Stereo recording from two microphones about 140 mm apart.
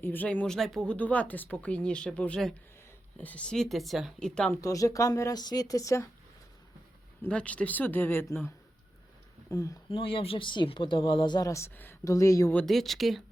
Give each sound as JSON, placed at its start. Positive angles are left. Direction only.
{"t": 0.0, "sound": "a woman's voice", "side_deg": 10}
{"t": 4.6, "sound": "speech", "side_deg": 25}
{"t": 7.2, "sound": "speech", "side_deg": 10}
{"t": 9.9, "sound": "speech", "side_deg": 40}
{"t": 12.5, "sound": "a woman's voice", "side_deg": 5}